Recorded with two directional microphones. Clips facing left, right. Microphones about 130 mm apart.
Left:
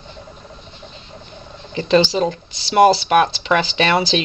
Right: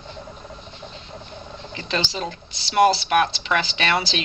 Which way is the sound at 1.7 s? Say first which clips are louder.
Left 12 dB; 30° left (ahead or behind).